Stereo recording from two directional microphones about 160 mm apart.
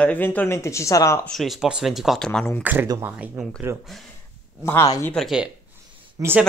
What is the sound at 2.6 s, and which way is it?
Speech, 10° right (ahead or behind).